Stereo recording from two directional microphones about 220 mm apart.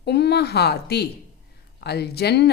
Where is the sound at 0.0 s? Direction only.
50° left (ahead or behind).